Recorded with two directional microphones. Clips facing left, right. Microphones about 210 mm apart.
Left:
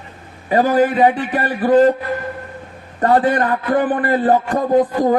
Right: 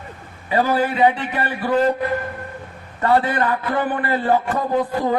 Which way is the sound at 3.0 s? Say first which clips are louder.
Left 3 dB; 40° left (ahead or behind).